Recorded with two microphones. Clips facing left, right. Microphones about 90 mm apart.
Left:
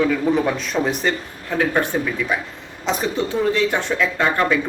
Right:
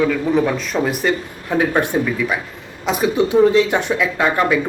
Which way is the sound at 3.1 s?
15° right (ahead or behind).